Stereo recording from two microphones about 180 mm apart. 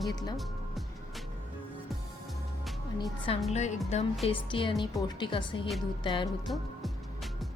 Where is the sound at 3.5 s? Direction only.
40° left (ahead or behind).